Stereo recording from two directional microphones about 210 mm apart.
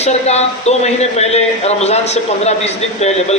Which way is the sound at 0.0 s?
30° left (ahead or behind).